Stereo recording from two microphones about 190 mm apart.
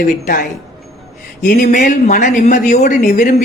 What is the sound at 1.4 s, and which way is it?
Speech, 45° left (ahead or behind).